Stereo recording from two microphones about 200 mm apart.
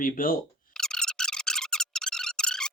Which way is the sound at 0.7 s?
5° left (ahead or behind).